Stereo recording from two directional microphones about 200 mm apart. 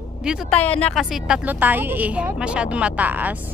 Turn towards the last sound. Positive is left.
turn(degrees=-10)  # may be behind; listen again after turning